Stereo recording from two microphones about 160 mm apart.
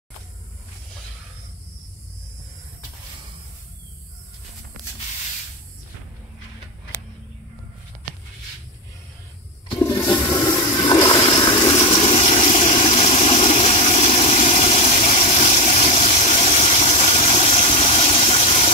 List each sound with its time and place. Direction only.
9.8 s toilet flush: 15° left (ahead or behind)
11.2 s water: 30° left (ahead or behind)